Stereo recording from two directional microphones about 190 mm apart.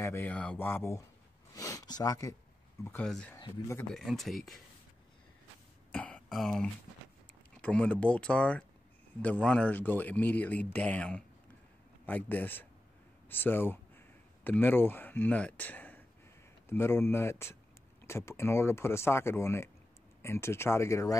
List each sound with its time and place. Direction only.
0.0 s speech: 10° left (ahead or behind)
1.5 s a sound: 15° left (ahead or behind)
2.8 s speech: 10° left (ahead or behind)
3.3 s speech: 20° left (ahead or behind)
3.9 s speech: centre (ahead or behind)
5.9 s throat clearing: 5° left (ahead or behind)
7.6 s speech: 5° left (ahead or behind)